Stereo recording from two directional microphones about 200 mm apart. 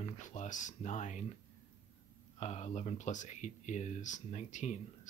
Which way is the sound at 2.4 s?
35° left (ahead or behind).